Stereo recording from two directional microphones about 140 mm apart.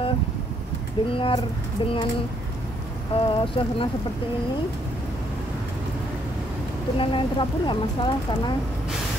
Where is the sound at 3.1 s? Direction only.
40° left (ahead or behind).